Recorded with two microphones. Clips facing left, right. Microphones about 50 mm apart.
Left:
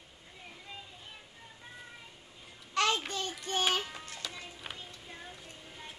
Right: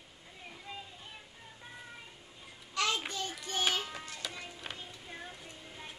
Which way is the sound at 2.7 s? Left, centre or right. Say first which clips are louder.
Left 4 dB; left.